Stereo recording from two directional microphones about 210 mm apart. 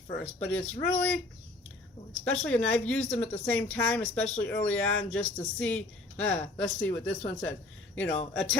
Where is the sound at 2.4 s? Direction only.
5° left (ahead or behind).